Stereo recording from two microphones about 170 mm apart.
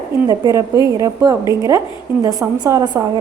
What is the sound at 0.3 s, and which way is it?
A woman's voice, 20° right (ahead or behind).